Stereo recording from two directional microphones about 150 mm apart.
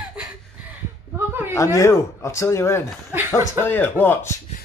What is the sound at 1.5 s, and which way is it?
Speech, 20° left (ahead or behind).